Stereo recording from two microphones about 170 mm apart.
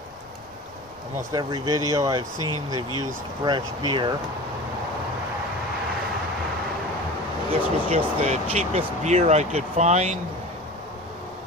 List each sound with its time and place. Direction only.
1.3 s speech: 20° right (ahead or behind)
2.3 s speech: 20° left (ahead or behind)
3.4 s speech: 25° right (ahead or behind)
7.5 s speech: 40° right (ahead or behind)